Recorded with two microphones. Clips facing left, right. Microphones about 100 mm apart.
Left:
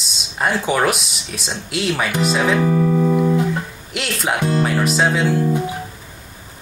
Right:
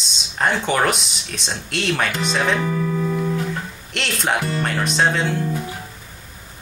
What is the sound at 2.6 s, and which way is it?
Speech, 20° left (ahead or behind).